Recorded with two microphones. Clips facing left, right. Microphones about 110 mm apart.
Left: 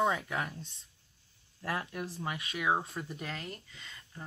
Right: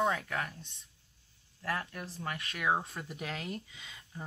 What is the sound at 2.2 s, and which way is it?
Speech, 5° left (ahead or behind).